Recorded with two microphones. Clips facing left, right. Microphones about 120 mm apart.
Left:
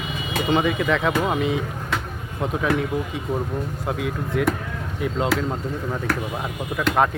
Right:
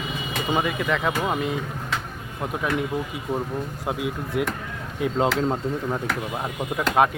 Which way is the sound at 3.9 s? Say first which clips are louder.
Left 1 dB; 10° right (ahead or behind).